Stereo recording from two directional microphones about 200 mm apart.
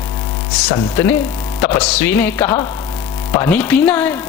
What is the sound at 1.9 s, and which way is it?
A man's voice, 10° left (ahead or behind).